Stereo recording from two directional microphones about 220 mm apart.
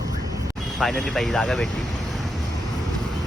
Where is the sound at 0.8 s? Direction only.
Centre (ahead or behind).